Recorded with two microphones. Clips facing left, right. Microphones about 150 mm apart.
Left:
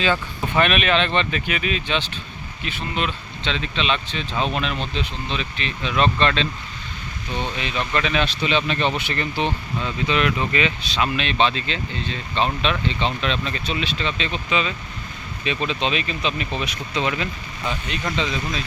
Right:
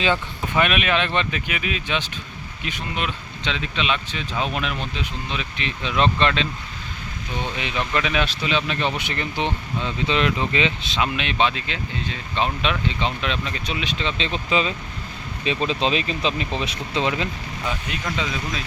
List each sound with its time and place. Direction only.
0.0 s speech: 15° right (ahead or behind)
7.6 s speech: 10° right (ahead or behind)
9.0 s speech: 15° right (ahead or behind)
15.4 s speech: 35° right (ahead or behind)
18.0 s speech: 5° right (ahead or behind)